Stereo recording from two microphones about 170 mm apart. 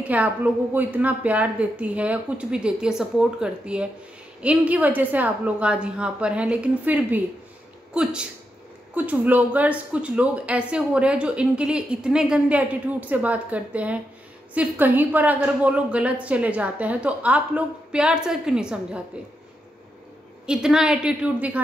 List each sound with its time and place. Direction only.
0.1 s a woman's voice: 10° right (ahead or behind)
20.4 s a woman's voice: 5° right (ahead or behind)